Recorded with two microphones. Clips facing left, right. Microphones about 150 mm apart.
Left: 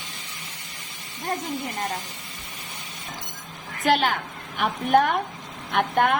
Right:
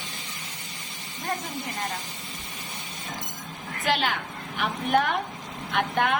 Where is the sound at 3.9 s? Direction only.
45° left (ahead or behind).